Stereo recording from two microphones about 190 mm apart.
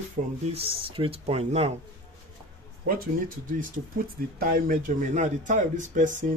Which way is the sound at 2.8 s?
50° right (ahead or behind).